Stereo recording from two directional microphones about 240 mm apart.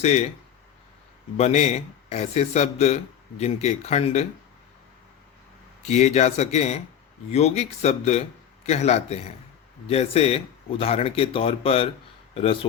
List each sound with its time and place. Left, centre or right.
0.0 s speech: left
1.4 s speech: left
5.9 s speech: left